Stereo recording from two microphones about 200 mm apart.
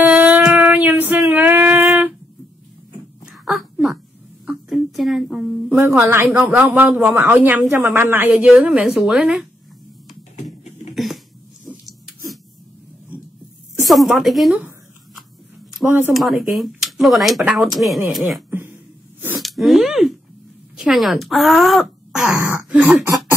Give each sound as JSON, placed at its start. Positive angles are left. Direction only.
{"t": 0.0, "sound": "a sound", "side_deg": -5}
{"t": 3.3, "sound": "a sound", "side_deg": -5}
{"t": 5.8, "sound": "speech", "side_deg": -10}
{"t": 10.3, "sound": "typing", "side_deg": 35}
{"t": 13.8, "sound": "speech", "side_deg": 0}
{"t": 15.8, "sound": "speech", "side_deg": -10}
{"t": 16.1, "sound": "speech", "side_deg": 0}
{"t": 19.2, "sound": "a sound", "side_deg": -5}
{"t": 20.7, "sound": "speech", "side_deg": 0}